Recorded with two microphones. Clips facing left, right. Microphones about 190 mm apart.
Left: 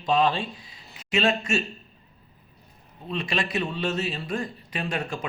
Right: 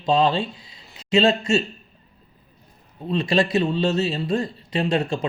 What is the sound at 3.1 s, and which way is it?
Speech, 30° right (ahead or behind).